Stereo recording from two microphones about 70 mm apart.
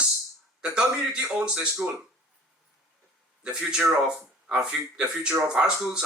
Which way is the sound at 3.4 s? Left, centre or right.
Centre.